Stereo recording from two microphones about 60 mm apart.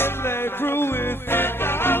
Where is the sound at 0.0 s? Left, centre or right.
Left.